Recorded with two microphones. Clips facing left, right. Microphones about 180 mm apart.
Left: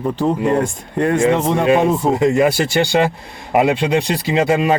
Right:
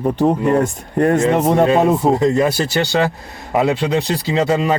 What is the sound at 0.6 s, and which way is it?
Speech, 40° right (ahead or behind).